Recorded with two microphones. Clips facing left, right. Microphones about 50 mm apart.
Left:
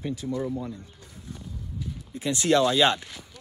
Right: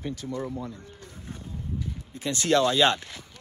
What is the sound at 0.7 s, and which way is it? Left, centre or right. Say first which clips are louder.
Pigeon: left 1 dB; right.